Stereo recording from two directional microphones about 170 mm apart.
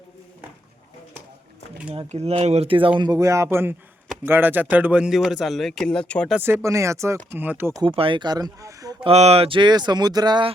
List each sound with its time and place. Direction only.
1.9 s speech: 35° right (ahead or behind)
3.0 s speech: 20° right (ahead or behind); by 6.3 s 5° left (ahead or behind)
6.3 s speech: 15° right (ahead or behind)
7.8 s speech: 30° right (ahead or behind)
9.0 s speech: 40° right (ahead or behind)